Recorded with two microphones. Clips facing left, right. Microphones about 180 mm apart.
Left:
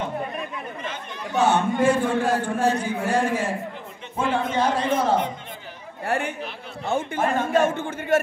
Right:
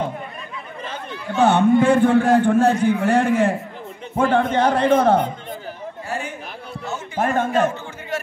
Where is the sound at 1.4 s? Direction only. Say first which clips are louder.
Right 5 dB; 60° right (ahead or behind).